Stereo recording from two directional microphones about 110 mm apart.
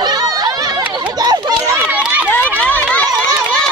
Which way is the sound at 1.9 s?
15° right (ahead or behind).